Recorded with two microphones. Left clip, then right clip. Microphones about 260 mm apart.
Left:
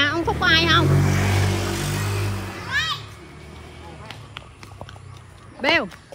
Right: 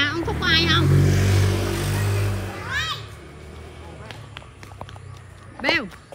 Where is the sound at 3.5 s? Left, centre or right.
Left.